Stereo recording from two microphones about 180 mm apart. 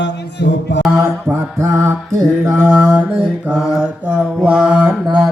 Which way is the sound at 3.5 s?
Centre (ahead or behind).